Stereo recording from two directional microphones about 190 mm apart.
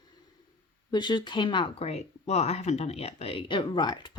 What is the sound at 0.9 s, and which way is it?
Speech, 25° left (ahead or behind).